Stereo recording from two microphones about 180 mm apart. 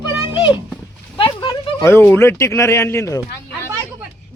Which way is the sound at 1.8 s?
10° left (ahead or behind).